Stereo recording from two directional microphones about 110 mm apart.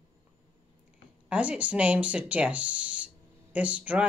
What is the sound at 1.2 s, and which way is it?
Speech, 10° right (ahead or behind).